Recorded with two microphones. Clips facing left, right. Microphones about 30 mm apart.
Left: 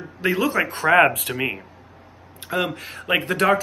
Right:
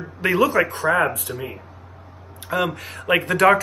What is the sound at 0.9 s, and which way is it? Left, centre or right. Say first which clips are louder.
Speech: left 5 dB; left.